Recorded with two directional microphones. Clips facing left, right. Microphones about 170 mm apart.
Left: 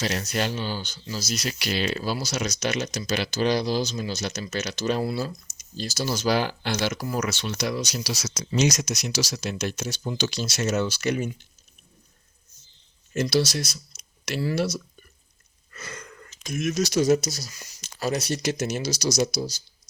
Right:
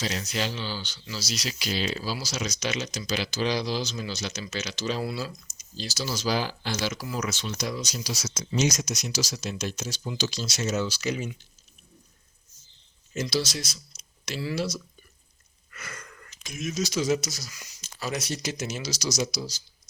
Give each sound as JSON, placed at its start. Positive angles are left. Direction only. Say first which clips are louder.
{"t": 0.0, "sound": "speech", "louder": "left 3 dB", "side_deg": 65}
{"t": 4.3, "sound": "speech", "louder": "left 4 dB", "side_deg": 55}
{"t": 13.1, "sound": "speech", "louder": "left 5 dB", "side_deg": 60}
{"t": 13.9, "sound": "tick-tock", "louder": "left 4 dB", "side_deg": 55}
{"t": 15.7, "sound": "wheeze", "louder": "left 3 dB", "side_deg": 25}
{"t": 16.5, "sound": "speech", "louder": "left 5 dB", "side_deg": 65}
{"t": 17.2, "sound": "speech", "louder": "left 5 dB", "side_deg": 30}
{"t": 18.3, "sound": "speech", "louder": "left 6 dB", "side_deg": 65}